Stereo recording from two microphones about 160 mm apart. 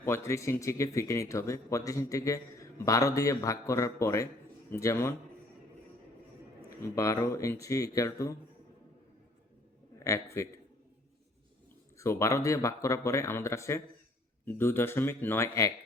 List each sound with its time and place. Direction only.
0.0 s speech: 15° left (ahead or behind)
6.7 s speech: 20° left (ahead or behind)
10.0 s speech: 20° left (ahead or behind)
11.9 s speech: 20° left (ahead or behind)